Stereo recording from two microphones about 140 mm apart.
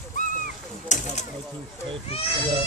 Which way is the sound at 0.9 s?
60° left (ahead or behind).